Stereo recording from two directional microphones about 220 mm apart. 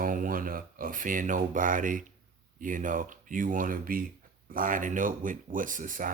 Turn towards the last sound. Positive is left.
turn(degrees=-35)  # may be behind; listen again after turning